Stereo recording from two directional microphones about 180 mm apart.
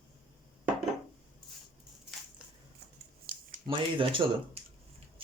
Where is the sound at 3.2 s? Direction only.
50° right (ahead or behind).